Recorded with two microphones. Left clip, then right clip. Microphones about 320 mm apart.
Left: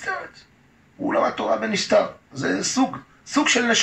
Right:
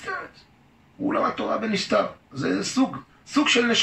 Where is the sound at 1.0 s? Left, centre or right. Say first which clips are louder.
Left 3 dB; left.